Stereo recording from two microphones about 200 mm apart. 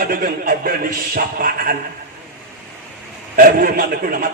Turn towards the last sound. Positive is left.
turn(degrees=-45)  # may be behind; listen again after turning